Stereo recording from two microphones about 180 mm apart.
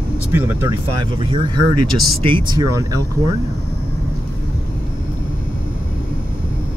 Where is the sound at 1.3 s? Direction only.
25° right (ahead or behind).